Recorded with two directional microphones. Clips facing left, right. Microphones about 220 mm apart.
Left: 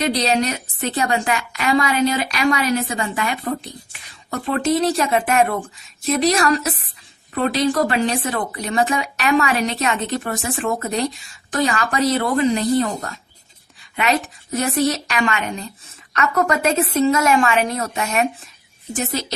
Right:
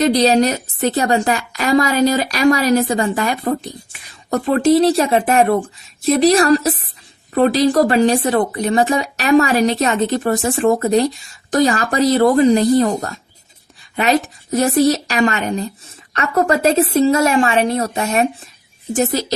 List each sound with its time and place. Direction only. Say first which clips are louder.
0.0 s speech: right 6 dB; 35° right (ahead or behind)